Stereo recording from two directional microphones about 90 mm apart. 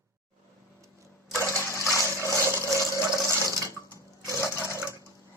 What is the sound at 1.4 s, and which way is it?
Water, 30° left (ahead or behind).